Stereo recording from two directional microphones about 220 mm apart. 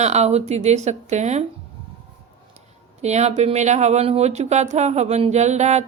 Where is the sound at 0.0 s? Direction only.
30° right (ahead or behind).